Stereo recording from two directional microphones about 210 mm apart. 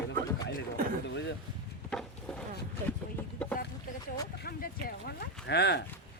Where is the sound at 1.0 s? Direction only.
55° left (ahead or behind).